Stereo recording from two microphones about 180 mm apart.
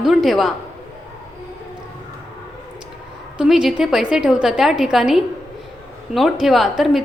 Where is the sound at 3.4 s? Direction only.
5° right (ahead or behind).